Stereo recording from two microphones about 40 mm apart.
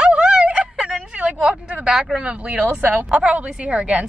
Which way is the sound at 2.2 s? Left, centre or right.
Right.